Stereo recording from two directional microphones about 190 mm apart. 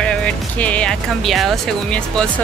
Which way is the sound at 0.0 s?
5° left (ahead or behind).